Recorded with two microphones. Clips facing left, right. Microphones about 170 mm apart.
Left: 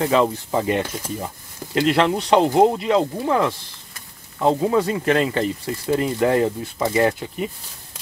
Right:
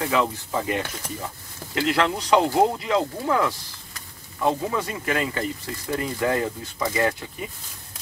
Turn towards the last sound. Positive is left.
turn(degrees=25)  # may be behind; listen again after turning